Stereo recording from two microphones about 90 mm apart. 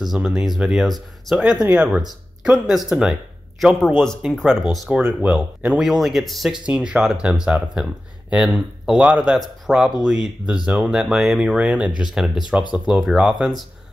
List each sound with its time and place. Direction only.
0.0 s speech: 5° right (ahead or behind)
1.7 s speech: 15° right (ahead or behind)
2.4 s speech: 5° right (ahead or behind)
6.6 s speech: 10° right (ahead or behind)
9.7 s speech: 5° right (ahead or behind)